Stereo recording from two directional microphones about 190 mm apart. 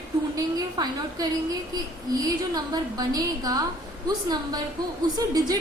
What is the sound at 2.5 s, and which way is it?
A woman's voice, 20° right (ahead or behind).